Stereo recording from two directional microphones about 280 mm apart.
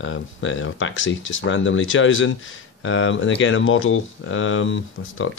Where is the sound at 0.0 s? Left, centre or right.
Left.